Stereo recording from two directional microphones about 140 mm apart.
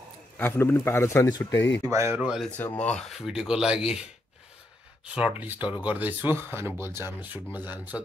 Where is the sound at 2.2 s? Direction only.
5° right (ahead or behind).